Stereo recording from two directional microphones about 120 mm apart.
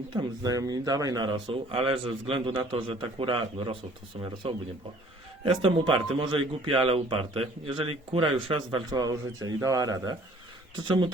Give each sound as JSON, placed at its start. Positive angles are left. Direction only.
{"t": 0.1, "sound": "speech", "side_deg": -35}
{"t": 5.6, "sound": "speech", "side_deg": -45}
{"t": 8.9, "sound": "speech", "side_deg": -35}
{"t": 10.8, "sound": "speech", "side_deg": -40}